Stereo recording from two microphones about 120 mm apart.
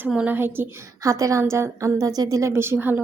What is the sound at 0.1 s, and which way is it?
A woman's voice, 10° right (ahead or behind).